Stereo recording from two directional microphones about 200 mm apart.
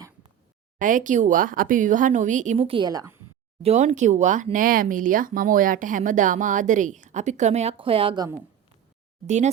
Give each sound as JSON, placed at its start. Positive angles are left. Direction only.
{"t": 0.8, "sound": "speech", "side_deg": -40}
{"t": 3.6, "sound": "speech", "side_deg": -35}
{"t": 9.2, "sound": "speech", "side_deg": -35}